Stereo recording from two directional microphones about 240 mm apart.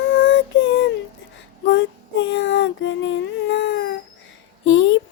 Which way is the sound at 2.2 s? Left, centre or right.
Left.